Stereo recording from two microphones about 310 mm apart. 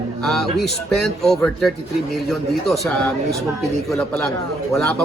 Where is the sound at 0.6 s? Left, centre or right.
Centre.